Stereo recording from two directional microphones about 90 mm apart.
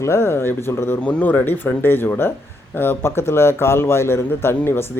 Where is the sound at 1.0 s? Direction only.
15° left (ahead or behind).